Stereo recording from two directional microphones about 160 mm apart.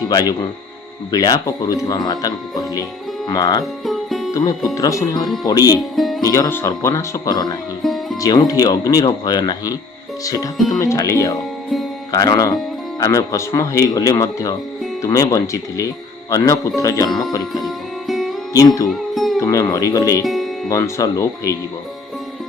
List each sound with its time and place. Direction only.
0.1 s speech: 25° left (ahead or behind)
3.6 s music: centre (ahead or behind)
4.3 s speech: 20° left (ahead or behind)
6.0 s speech: centre (ahead or behind)
6.2 s speech: 20° left (ahead or behind)
7.8 s music: centre (ahead or behind)
8.2 s speech: 20° left (ahead or behind)
17.5 s music: centre (ahead or behind)
18.5 s speech: 20° left (ahead or behind)
18.9 s music: centre (ahead or behind)
19.4 s speech: 20° left (ahead or behind)
20.2 s music: centre (ahead or behind)
20.7 s speech: 20° left (ahead or behind)